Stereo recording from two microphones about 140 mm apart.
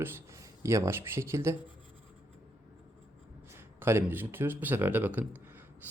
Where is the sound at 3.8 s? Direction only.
15° right (ahead or behind).